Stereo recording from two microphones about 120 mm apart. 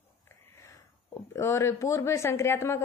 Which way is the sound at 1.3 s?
20° left (ahead or behind).